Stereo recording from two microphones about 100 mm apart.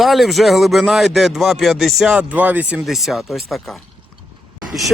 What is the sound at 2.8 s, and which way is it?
Speech, centre (ahead or behind).